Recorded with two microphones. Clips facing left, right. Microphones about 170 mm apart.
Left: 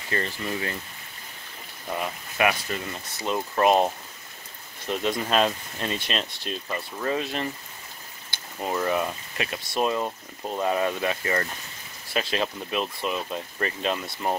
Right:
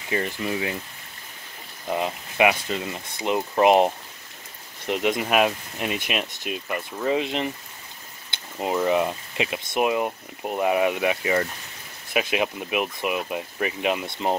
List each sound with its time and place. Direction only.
0.1 s speech: 15° right (ahead or behind)
1.9 s speech: 20° right (ahead or behind)
8.5 s speech: 20° right (ahead or behind)